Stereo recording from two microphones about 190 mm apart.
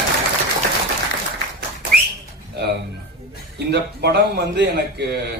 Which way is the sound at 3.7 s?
60° right (ahead or behind).